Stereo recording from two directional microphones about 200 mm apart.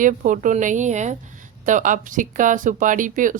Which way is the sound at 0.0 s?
40° right (ahead or behind).